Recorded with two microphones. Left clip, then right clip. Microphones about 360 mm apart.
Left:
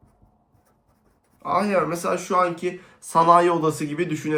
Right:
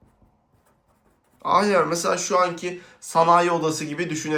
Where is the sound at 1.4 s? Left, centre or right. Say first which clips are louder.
Right 3 dB; centre.